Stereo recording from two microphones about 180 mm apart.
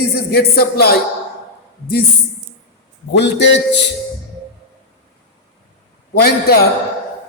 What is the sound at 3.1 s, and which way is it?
Speech, 70° left (ahead or behind).